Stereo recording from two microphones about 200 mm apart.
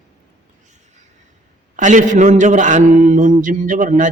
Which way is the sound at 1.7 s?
40° right (ahead or behind).